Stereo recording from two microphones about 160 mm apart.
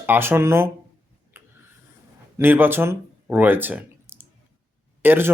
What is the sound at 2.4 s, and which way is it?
Speech, 15° right (ahead or behind).